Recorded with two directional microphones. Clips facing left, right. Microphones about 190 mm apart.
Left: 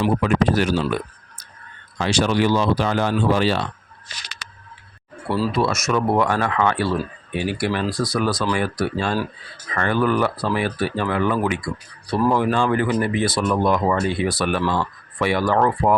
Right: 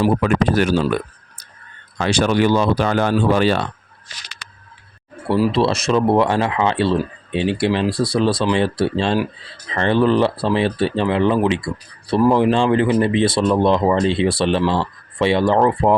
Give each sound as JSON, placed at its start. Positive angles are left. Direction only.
{"t": 0.0, "sound": "speech", "side_deg": -55}
{"t": 2.0, "sound": "speech", "side_deg": -55}
{"t": 5.5, "sound": "speech", "side_deg": -30}